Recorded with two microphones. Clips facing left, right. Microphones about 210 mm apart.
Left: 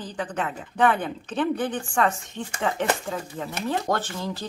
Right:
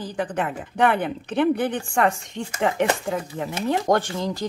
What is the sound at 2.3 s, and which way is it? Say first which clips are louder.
Speech: right 4 dB; 15° right (ahead or behind).